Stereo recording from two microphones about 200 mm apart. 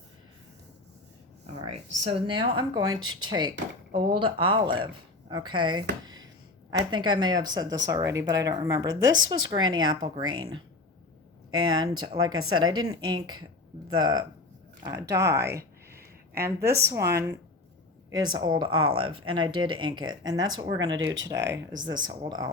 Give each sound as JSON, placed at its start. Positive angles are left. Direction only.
{"t": 1.7, "sound": "speech", "side_deg": -30}
{"t": 11.5, "sound": "speech", "side_deg": -20}
{"t": 18.8, "sound": "speech", "side_deg": -90}
{"t": 19.8, "sound": "speech", "side_deg": -20}